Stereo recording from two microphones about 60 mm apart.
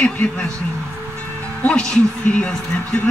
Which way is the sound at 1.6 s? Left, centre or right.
Centre.